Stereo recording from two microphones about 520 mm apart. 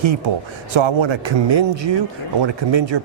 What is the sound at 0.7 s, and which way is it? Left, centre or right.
Speech, right.